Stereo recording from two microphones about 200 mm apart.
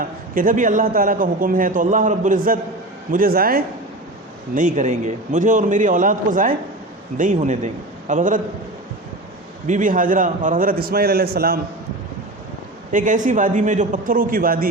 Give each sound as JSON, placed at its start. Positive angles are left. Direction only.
{"t": 0.0, "sound": "a man's voice", "side_deg": -45}
{"t": 9.6, "sound": "a man's voice", "side_deg": -40}
{"t": 12.9, "sound": "a man's voice", "side_deg": -40}